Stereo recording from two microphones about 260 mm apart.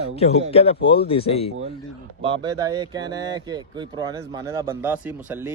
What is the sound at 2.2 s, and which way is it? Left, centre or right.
Speech, centre.